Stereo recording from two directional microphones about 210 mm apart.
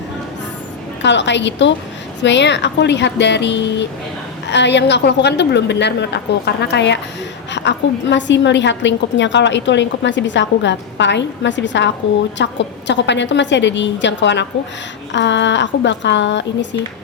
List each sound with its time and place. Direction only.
1.0 s a woman's voice: 55° left (ahead or behind)